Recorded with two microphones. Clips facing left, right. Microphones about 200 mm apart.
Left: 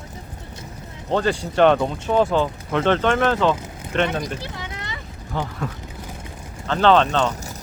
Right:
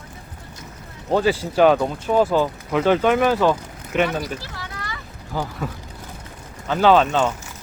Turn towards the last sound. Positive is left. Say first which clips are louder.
# right 1 dB
turn(degrees=-5)  # may be behind; listen again after turning